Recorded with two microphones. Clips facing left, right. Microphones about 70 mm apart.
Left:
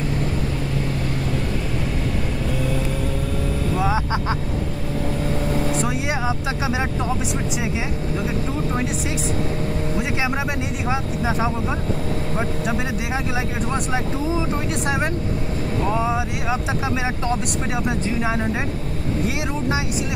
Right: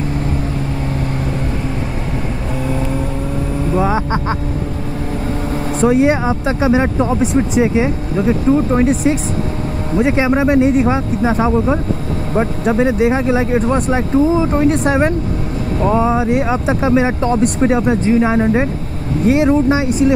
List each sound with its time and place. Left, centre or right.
3.7 s vehicle: right
5.5 s speech: right